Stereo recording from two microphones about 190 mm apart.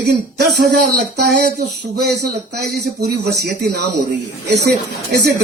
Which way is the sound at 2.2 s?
60° right (ahead or behind).